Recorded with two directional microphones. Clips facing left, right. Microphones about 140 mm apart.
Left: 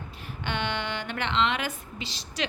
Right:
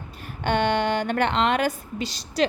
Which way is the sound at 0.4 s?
45° right (ahead or behind).